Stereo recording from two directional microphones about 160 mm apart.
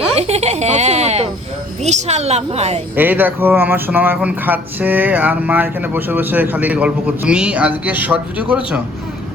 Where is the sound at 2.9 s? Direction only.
10° right (ahead or behind).